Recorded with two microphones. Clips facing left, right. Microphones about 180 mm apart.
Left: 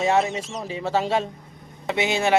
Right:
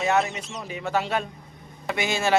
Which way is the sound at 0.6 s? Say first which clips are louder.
Left 2 dB; 30° left (ahead or behind).